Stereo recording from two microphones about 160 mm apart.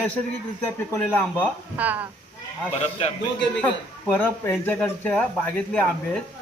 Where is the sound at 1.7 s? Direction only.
10° right (ahead or behind).